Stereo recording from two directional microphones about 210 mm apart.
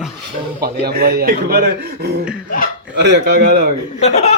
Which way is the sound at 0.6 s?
50° right (ahead or behind).